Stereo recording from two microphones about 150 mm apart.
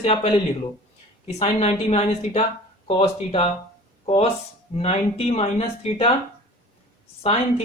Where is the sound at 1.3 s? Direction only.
45° left (ahead or behind).